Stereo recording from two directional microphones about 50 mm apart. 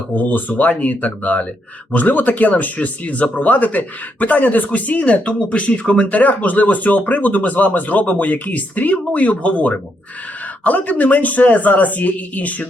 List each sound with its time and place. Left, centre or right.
0.2 s speech: left